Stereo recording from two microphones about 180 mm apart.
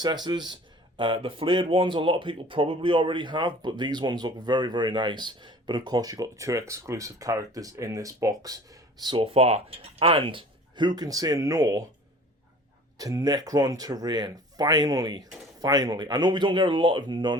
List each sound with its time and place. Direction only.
0.0 s speech: 25° right (ahead or behind)
13.0 s speech: 20° right (ahead or behind)